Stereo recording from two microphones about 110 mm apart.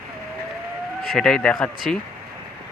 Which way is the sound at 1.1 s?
5° left (ahead or behind).